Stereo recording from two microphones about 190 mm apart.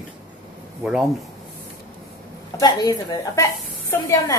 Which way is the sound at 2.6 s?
20° left (ahead or behind).